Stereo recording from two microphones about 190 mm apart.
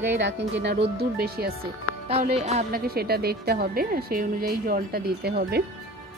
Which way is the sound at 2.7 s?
50° right (ahead or behind).